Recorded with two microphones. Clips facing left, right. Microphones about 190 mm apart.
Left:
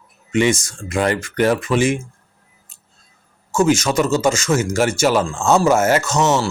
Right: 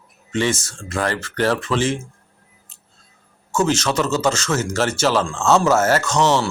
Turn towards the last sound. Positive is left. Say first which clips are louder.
# even
turn(degrees=5)  # may be behind; listen again after turning